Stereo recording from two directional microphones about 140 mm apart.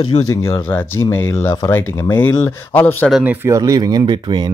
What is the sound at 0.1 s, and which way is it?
Speech, 50° left (ahead or behind).